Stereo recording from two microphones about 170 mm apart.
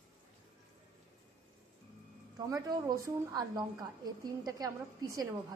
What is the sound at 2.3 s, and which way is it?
A woman's voice, 20° right (ahead or behind).